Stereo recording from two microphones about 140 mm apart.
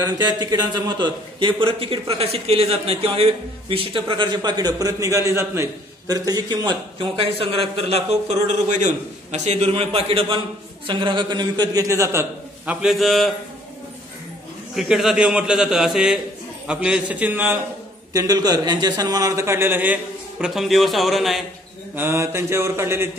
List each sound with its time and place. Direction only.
0.0 s a man's voice: 30° right (ahead or behind)
7.2 s a man's voice: 40° right (ahead or behind); by 12.7 s 20° right (ahead or behind)
12.8 s a man's voice: centre (ahead or behind)
14.8 s a man's voice: 5° right (ahead or behind)
18.1 s a man's voice: 25° right (ahead or behind); by 21.5 s centre (ahead or behind)
21.9 s a man's voice: 20° right (ahead or behind)